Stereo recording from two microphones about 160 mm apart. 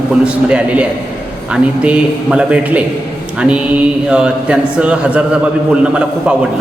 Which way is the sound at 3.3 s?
5° right (ahead or behind).